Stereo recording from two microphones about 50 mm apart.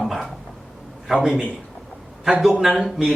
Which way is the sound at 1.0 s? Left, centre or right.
Centre.